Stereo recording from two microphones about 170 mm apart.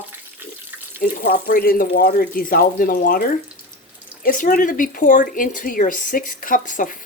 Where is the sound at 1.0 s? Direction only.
60° left (ahead or behind).